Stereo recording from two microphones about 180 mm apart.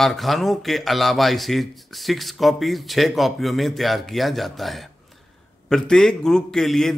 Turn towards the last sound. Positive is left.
turn(degrees=0)  # may be behind; listen again after turning